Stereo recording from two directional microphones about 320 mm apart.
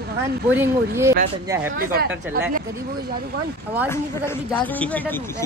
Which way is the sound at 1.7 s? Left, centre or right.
Right.